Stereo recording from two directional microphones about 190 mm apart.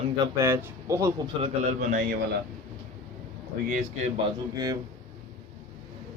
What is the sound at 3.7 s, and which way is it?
Speech, 40° right (ahead or behind).